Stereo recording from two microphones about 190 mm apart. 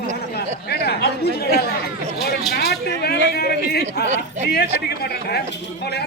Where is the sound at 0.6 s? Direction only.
55° left (ahead or behind).